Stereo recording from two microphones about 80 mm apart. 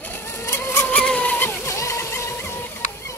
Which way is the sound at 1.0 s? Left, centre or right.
Centre.